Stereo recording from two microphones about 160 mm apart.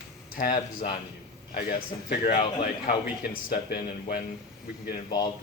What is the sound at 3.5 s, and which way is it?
Speech, 75° left (ahead or behind).